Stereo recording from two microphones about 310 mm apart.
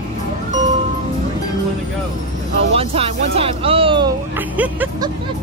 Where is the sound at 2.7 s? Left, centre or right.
Centre.